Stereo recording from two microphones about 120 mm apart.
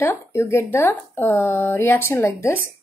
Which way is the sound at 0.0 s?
20° left (ahead or behind).